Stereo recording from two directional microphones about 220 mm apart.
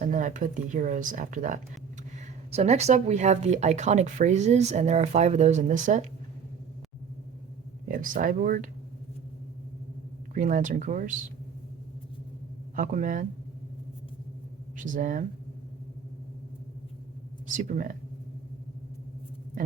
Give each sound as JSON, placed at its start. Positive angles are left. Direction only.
{"t": 0.0, "sound": "a woman's voice", "side_deg": -35}
{"t": 7.9, "sound": "speech", "side_deg": -35}
{"t": 10.3, "sound": "a woman's voice", "side_deg": -35}
{"t": 12.7, "sound": "a woman's voice", "side_deg": -35}
{"t": 14.9, "sound": "a woman's voice", "side_deg": -35}
{"t": 17.5, "sound": "a woman's voice", "side_deg": -35}